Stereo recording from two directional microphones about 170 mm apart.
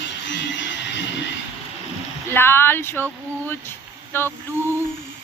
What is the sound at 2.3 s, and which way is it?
Speech, 15° left (ahead or behind).